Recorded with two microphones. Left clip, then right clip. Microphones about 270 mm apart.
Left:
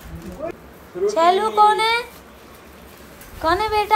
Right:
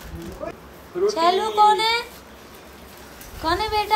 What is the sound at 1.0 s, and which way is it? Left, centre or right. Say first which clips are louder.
A woman's voice: left 3 dB; centre.